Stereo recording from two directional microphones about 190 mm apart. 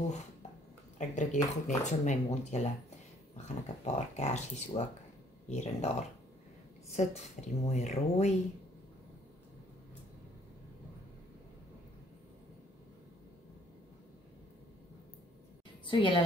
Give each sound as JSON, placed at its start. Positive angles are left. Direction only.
{"t": 0.9, "sound": "speech", "side_deg": 40}
{"t": 6.9, "sound": "speech", "side_deg": 35}
{"t": 15.9, "sound": "a woman's voice", "side_deg": 25}